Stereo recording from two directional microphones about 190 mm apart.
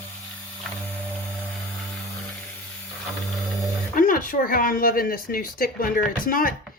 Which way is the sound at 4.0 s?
45° left (ahead or behind).